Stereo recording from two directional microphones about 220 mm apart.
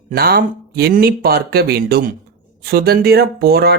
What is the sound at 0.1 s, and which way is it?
Speech, 45° right (ahead or behind).